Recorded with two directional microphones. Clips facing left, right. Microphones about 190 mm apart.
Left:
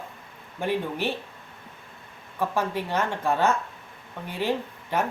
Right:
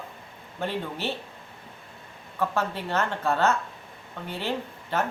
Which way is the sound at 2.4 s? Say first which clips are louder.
Left 1 dB; 15° left (ahead or behind).